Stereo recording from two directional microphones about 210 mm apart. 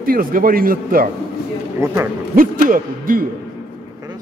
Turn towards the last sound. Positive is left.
turn(degrees=-40)  # may be behind; listen again after turning